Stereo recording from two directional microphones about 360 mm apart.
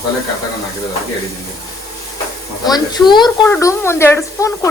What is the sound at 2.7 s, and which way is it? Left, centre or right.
Speech, centre.